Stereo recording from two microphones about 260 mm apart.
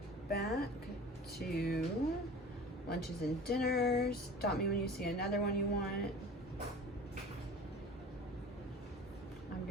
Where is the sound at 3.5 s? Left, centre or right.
Left.